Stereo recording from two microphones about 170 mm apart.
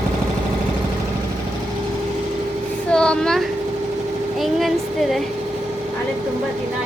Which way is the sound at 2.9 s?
5° left (ahead or behind).